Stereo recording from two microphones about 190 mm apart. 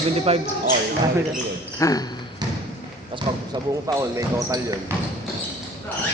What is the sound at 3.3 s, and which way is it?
Speech, 25° right (ahead or behind).